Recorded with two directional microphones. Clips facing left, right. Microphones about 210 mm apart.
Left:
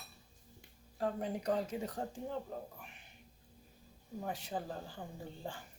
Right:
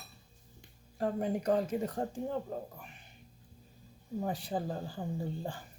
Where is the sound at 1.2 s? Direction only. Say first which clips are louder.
Right 7 dB; 50° right (ahead or behind).